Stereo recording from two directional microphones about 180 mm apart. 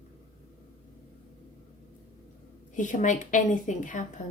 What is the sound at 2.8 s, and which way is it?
Speech, 45° left (ahead or behind).